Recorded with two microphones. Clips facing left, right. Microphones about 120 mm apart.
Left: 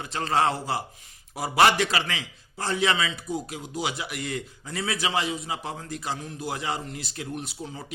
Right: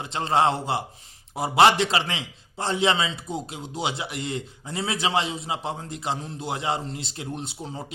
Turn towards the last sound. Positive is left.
turn(degrees=-30)  # may be behind; listen again after turning